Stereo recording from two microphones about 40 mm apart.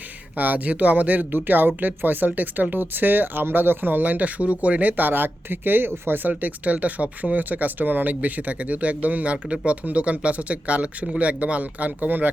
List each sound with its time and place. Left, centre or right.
0.3 s speech: right